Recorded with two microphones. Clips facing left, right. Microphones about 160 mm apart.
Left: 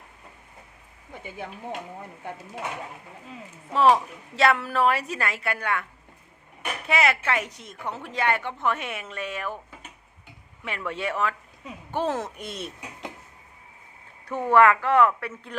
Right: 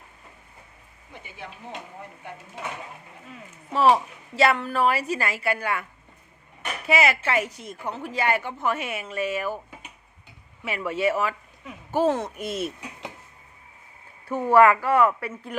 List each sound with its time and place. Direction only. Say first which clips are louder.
3.7 s a woman's voice: even; 5° right (ahead or behind)
6.8 s a woman's voice: right 1 dB; 5° right (ahead or behind)
10.6 s a woman's voice: right 5 dB; 5° right (ahead or behind)
14.3 s a woman's voice: right 2 dB; 5° right (ahead or behind)